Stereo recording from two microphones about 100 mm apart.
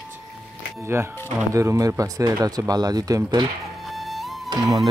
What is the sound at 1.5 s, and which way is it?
Speech, 30° right (ahead or behind).